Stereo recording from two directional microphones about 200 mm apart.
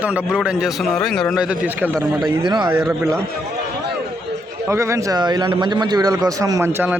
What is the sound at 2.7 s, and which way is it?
Speech, 5° right (ahead or behind).